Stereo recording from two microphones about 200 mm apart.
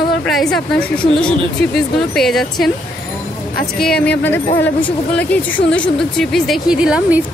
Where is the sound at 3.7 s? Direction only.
5° left (ahead or behind).